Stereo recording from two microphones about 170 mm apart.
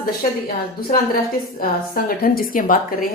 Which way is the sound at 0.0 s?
60° left (ahead or behind).